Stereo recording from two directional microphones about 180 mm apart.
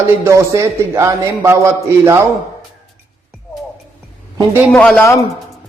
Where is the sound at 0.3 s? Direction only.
15° right (ahead or behind).